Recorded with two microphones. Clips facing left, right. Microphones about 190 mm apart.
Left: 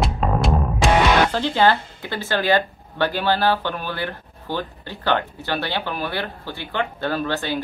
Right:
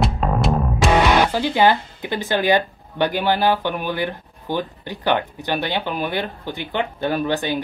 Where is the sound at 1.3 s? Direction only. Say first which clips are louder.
Right 1 dB; 10° right (ahead or behind).